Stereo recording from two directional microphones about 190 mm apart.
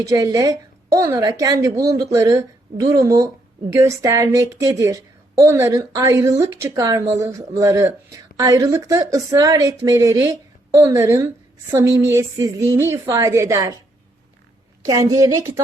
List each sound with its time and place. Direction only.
0.0 s a woman's voice: 20° right (ahead or behind)
14.8 s a woman's voice: 15° right (ahead or behind)